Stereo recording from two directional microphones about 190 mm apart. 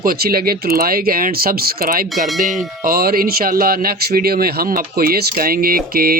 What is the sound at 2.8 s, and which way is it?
A man's voice, 55° right (ahead or behind).